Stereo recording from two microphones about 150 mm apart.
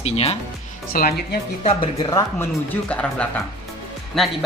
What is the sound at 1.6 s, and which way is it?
Speech, 40° left (ahead or behind).